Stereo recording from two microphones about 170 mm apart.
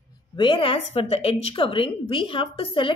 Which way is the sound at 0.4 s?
30° left (ahead or behind).